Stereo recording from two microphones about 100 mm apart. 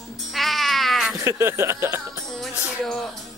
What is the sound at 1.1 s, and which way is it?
Speech, 30° right (ahead or behind).